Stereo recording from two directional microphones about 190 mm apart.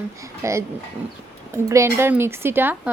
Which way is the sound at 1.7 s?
15° right (ahead or behind).